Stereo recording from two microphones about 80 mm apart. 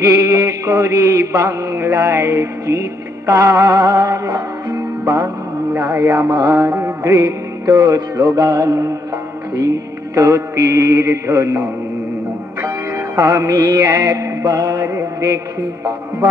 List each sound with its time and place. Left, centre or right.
0.0 s mantra: right
3.8 s music: right
6.7 s music: right
7.2 s music: right
9.6 s mantra: right
12.6 s music: right
14.8 s mantra: right